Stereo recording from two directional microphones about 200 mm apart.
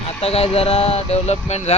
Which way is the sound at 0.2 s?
30° left (ahead or behind).